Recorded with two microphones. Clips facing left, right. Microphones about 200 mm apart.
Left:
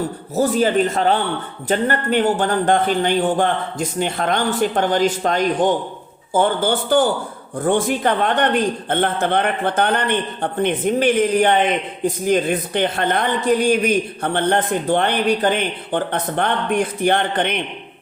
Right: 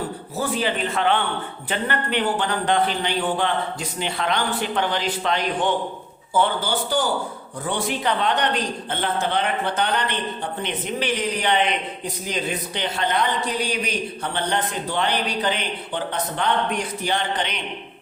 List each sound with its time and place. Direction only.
0.3 s a woman's voice: 45° left (ahead or behind)